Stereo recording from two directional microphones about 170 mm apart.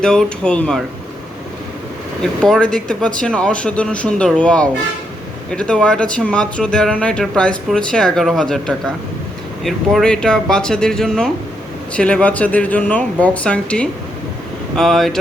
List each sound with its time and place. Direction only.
0.0 s speech: 5° left (ahead or behind)
2.2 s speech: 5° left (ahead or behind)